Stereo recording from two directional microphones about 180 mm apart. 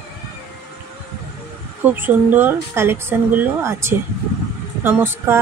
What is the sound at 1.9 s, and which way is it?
Speech, 10° right (ahead or behind).